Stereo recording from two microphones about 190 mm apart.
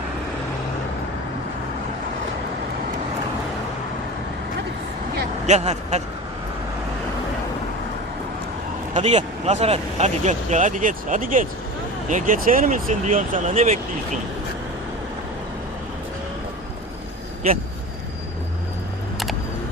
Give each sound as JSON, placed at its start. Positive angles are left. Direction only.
{"t": 5.5, "sound": "speech", "side_deg": -35}
{"t": 8.9, "sound": "speech", "side_deg": -35}